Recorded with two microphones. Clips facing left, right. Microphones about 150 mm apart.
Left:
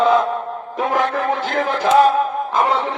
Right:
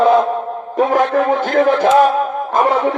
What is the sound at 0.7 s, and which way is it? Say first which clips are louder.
Speech: right 6 dB; 50° right (ahead or behind).